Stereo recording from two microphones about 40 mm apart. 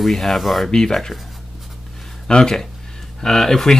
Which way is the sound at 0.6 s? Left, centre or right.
Centre.